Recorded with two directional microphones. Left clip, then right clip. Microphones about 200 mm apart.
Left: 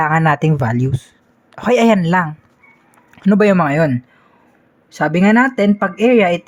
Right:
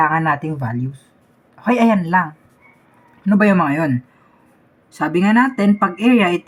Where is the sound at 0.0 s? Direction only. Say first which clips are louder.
Left 2 dB; 50° left (ahead or behind).